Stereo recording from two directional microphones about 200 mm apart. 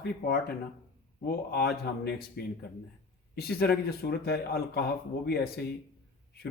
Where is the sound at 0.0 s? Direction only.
50° left (ahead or behind).